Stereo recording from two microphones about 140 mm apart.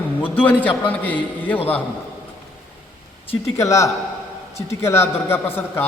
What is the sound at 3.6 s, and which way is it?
A man's voice, 20° left (ahead or behind).